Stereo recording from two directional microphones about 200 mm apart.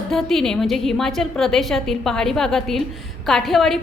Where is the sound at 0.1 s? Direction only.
Centre (ahead or behind).